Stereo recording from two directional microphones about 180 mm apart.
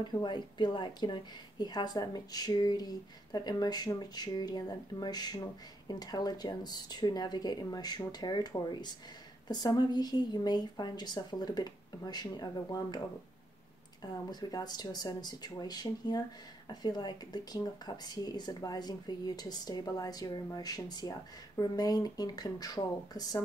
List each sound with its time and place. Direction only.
0.0 s speech: 25° left (ahead or behind)
14.0 s speech: 20° left (ahead or behind)